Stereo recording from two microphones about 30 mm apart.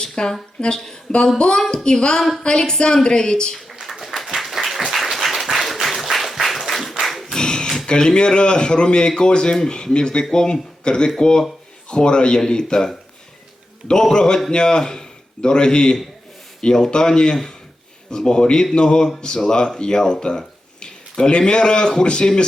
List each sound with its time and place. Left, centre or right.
0.0 s a sound: left
0.6 s speech: left
1.1 s speech: centre
1.7 s speech: left
3.8 s a sound: centre
5.1 s applause: centre
7.0 s singing: centre
7.3 s a sound: left
7.9 s speech: left
8.1 s speech: left
14.1 s a man's voice: left